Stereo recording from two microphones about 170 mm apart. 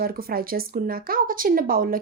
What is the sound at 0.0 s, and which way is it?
A woman's voice, 60° right (ahead or behind).